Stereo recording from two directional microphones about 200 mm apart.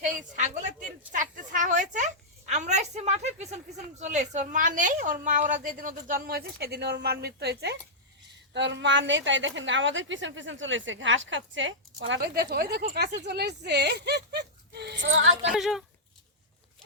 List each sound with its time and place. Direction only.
0.0 s a sound: 40° right (ahead or behind)
2.5 s a woman's voice: 35° right (ahead or behind); by 14.9 s 55° right (ahead or behind)
15.0 s female singing: 70° right (ahead or behind)
15.5 s speech: centre (ahead or behind)